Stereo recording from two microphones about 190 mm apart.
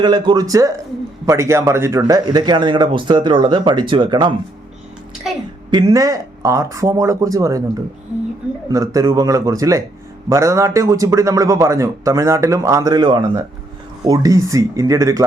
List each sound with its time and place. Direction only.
0.0 s a man's voice: 20° right (ahead or behind)
5.7 s a man's voice: 20° right (ahead or behind)
8.7 s a man's voice: 20° right (ahead or behind)